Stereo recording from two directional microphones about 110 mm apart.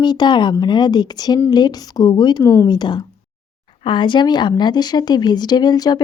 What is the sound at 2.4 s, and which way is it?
Speech, 25° left (ahead or behind).